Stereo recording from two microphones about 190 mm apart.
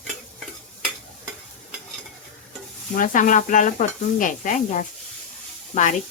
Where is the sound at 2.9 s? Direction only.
45° left (ahead or behind).